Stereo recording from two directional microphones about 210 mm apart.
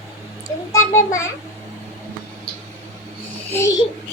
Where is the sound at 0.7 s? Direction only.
15° left (ahead or behind).